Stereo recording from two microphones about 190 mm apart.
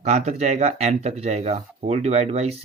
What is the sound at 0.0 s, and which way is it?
Speech, 35° right (ahead or behind).